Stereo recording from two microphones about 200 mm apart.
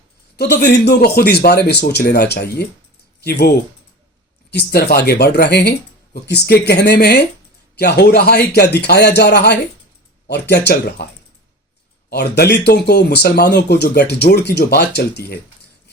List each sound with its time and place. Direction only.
0.3 s speech: 55° left (ahead or behind)
4.5 s speech: 50° left (ahead or behind)
12.1 s speech: 55° left (ahead or behind)